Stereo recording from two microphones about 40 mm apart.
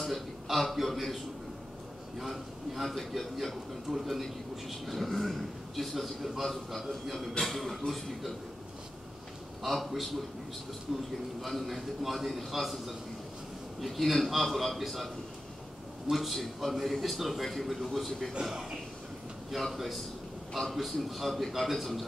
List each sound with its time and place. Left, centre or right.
0.1 s a man's voice: centre
9.6 s a man's voice: centre
16.1 s a man's voice: centre
18.4 s a man's voice: centre